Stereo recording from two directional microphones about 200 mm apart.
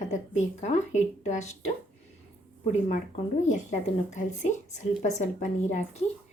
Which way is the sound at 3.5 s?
35° left (ahead or behind).